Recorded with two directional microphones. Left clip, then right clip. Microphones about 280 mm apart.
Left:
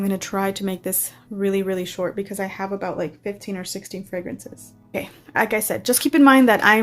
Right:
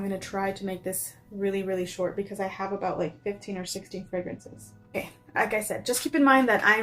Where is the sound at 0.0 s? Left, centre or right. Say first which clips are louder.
Left 6 dB; left.